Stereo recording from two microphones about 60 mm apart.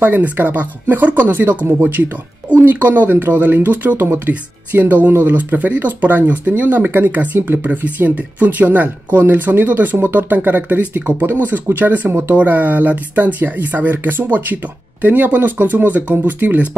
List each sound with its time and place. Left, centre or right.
0.0 s speech: right